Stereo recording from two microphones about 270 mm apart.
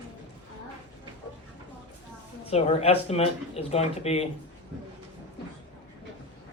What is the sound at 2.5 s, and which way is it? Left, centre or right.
Speech, left.